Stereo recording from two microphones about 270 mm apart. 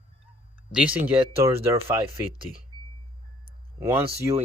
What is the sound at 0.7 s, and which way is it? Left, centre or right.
Speech, centre.